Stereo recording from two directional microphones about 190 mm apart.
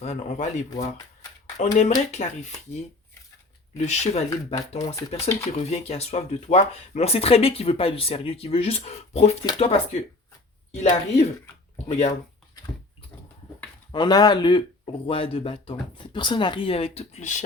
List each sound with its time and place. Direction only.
0.0 s speech: 35° left (ahead or behind)
3.8 s speech: 35° left (ahead or behind)
13.9 s speech: 20° left (ahead or behind); by 17.4 s 40° left (ahead or behind)